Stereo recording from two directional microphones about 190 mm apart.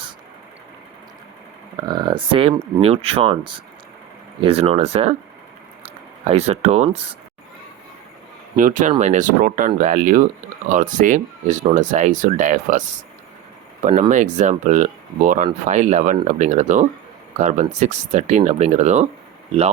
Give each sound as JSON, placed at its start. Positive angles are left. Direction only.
{"t": 1.7, "sound": "speech", "side_deg": -20}
{"t": 6.2, "sound": "speech", "side_deg": -35}
{"t": 8.5, "sound": "speech", "side_deg": -40}
{"t": 14.1, "sound": "speech", "side_deg": -40}